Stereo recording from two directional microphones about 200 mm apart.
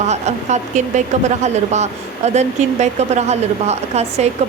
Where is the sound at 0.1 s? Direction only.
35° right (ahead or behind).